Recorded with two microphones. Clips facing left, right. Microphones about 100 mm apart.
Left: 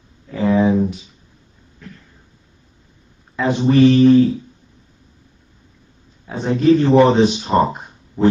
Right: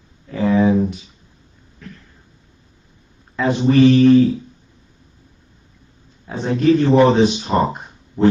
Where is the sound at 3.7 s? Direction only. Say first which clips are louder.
Even; centre (ahead or behind).